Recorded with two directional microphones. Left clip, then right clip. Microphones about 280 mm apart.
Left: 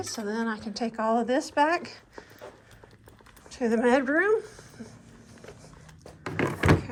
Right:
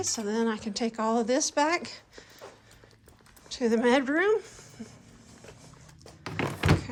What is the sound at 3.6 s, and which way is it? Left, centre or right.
A woman's voice, right.